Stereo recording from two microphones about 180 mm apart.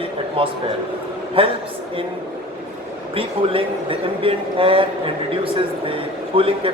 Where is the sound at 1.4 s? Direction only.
30° right (ahead or behind).